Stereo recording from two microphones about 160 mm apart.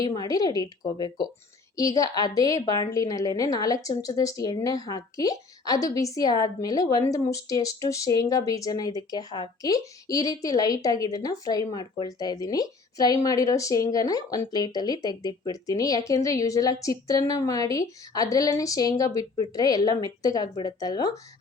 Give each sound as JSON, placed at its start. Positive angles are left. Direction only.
{"t": 0.1, "sound": "speech", "side_deg": 25}